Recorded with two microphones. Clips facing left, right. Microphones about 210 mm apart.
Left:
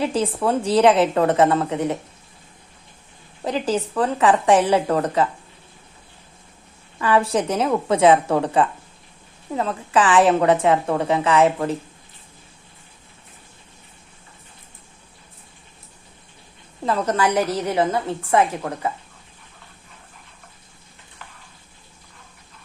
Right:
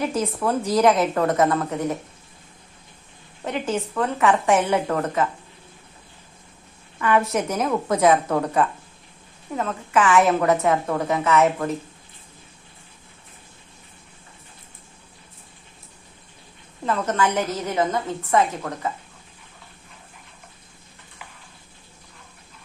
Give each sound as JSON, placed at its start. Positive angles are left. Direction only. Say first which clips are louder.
{"t": 0.0, "sound": "a woman's voice", "louder": "left 2 dB", "side_deg": 30}
{"t": 3.4, "sound": "a woman's voice", "louder": "left 3 dB", "side_deg": 35}
{"t": 7.0, "sound": "a woman's voice", "louder": "left 2 dB", "side_deg": 30}
{"t": 16.8, "sound": "a woman's voice", "louder": "left 2 dB", "side_deg": 35}